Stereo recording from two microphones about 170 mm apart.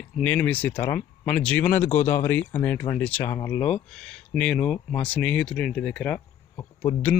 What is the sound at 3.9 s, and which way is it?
Speech, 5° left (ahead or behind).